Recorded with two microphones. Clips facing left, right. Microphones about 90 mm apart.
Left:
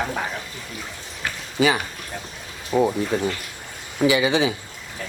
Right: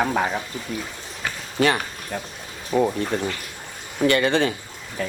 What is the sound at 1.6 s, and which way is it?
Speech, 5° left (ahead or behind).